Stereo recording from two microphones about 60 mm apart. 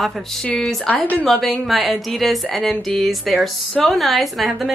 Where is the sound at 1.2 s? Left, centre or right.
Centre.